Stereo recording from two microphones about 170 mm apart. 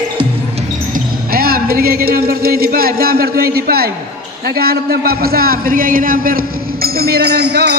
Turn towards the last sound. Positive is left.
turn(degrees=-75)  # may be behind; listen again after turning